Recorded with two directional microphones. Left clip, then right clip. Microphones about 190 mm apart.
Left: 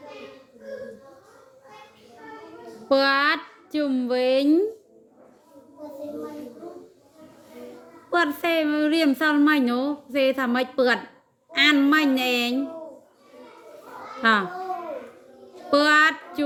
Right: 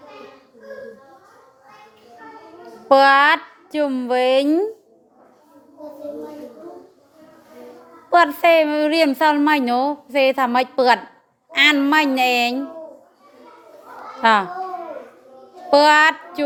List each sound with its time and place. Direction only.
2.9 s a woman's voice: 15° left (ahead or behind)
8.1 s a woman's voice: 15° left (ahead or behind)
14.2 s a child's voice: 15° left (ahead or behind)
15.7 s a child's voice: 15° left (ahead or behind)